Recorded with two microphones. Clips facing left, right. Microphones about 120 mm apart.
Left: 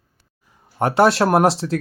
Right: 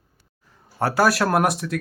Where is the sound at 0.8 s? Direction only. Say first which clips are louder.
Left 4 dB; 25° left (ahead or behind).